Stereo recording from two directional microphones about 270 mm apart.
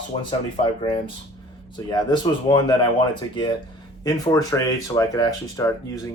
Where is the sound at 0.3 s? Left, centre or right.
Centre.